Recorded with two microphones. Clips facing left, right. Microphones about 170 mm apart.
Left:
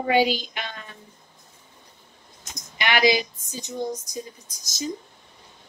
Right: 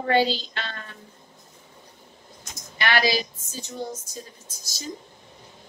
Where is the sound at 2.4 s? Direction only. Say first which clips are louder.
Right 1 dB; 15° left (ahead or behind).